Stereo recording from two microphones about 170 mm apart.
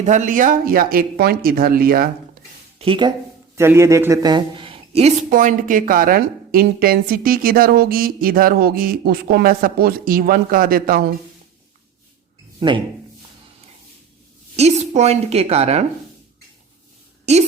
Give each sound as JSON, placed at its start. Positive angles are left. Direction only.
{"t": 0.0, "sound": "a woman's voice", "side_deg": -45}
{"t": 2.7, "sound": "speech", "side_deg": -30}
{"t": 3.5, "sound": "a man's voice", "side_deg": -15}
{"t": 5.3, "sound": "a woman's voice", "side_deg": -50}
{"t": 12.5, "sound": "speech", "side_deg": -30}
{"t": 14.5, "sound": "a woman's voice", "side_deg": -40}